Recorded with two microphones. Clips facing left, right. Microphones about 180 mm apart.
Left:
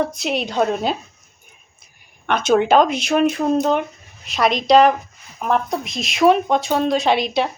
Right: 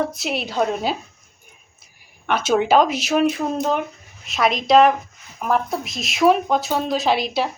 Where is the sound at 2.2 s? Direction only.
5° right (ahead or behind).